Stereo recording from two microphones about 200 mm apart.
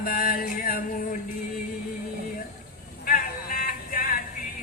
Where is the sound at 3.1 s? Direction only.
45° left (ahead or behind).